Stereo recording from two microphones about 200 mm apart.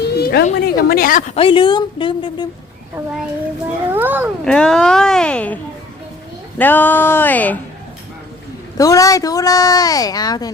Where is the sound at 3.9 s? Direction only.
10° right (ahead or behind).